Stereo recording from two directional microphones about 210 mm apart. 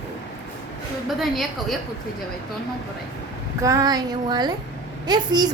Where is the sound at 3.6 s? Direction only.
15° right (ahead or behind).